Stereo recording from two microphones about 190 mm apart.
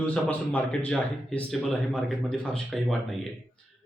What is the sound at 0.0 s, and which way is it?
Speech, 10° left (ahead or behind).